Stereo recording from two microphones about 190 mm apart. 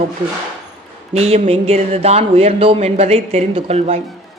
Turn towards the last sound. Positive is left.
turn(degrees=-35)  # may be behind; listen again after turning